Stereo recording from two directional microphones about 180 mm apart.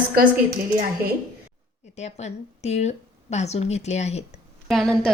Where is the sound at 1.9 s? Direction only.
40° left (ahead or behind).